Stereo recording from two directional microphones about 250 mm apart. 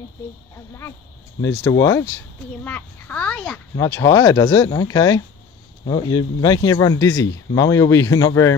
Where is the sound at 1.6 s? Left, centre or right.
Centre.